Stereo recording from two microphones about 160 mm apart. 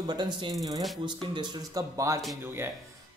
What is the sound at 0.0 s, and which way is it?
A man's voice, 30° right (ahead or behind).